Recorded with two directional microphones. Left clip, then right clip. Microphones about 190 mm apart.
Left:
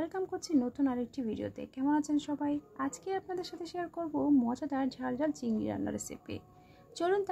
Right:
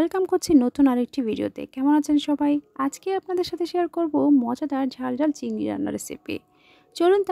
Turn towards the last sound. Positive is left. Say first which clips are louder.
# right 12 dB
turn(degrees=-45)  # may be behind; listen again after turning